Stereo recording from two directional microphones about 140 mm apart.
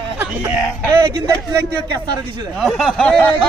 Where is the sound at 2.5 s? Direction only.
Centre (ahead or behind).